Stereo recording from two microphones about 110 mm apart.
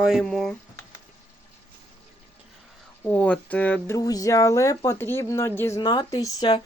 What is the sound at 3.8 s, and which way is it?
Speech, 30° left (ahead or behind).